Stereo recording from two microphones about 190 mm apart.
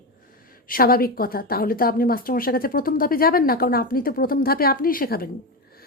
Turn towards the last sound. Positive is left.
turn(degrees=50)  # may be behind; listen again after turning